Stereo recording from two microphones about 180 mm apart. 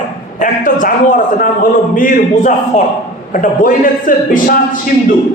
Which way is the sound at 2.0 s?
45° left (ahead or behind).